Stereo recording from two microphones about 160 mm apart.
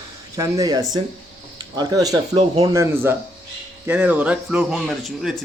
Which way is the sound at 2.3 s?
35° right (ahead or behind).